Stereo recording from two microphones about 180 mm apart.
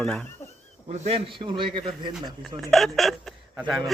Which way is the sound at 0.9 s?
35° right (ahead or behind).